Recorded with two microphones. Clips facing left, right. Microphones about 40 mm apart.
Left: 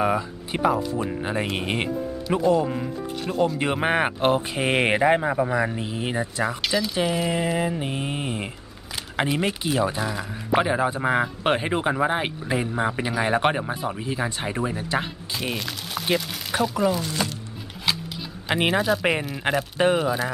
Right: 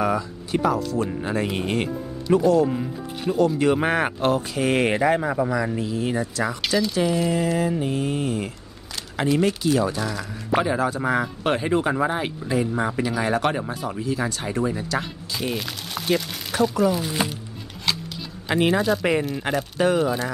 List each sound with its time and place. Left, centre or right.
0.0 s speech: centre
2.7 s speech: centre
3.5 s speech: left
6.4 s speech: centre; by 15.0 s left
15.3 s speech: centre
16.5 s speech: left
17.2 s speech: centre
17.8 s music: centre
18.7 s speech: centre
19.5 s speech: left
20.0 s speech: centre